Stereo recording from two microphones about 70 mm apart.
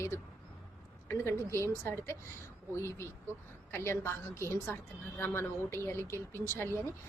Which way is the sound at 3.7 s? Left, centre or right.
Left.